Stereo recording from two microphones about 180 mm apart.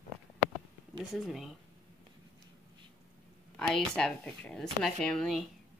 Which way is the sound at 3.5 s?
5° left (ahead or behind).